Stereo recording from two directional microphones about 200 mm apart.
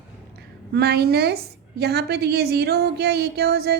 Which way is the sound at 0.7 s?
55° right (ahead or behind).